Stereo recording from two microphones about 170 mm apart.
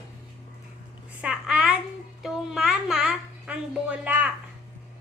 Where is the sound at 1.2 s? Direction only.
5° right (ahead or behind).